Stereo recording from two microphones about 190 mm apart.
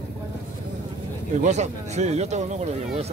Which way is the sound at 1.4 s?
35° right (ahead or behind).